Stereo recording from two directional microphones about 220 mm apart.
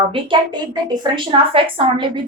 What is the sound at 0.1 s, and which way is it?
A woman's voice, 20° right (ahead or behind).